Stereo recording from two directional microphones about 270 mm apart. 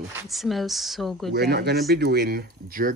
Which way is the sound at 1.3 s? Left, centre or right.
Right.